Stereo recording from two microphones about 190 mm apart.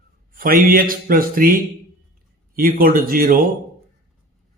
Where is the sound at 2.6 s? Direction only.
50° right (ahead or behind).